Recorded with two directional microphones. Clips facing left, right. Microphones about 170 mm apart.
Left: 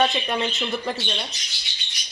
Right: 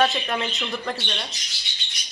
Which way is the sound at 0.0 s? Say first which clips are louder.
Even; centre (ahead or behind).